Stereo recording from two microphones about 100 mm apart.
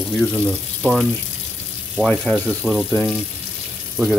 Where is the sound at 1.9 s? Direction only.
15° left (ahead or behind).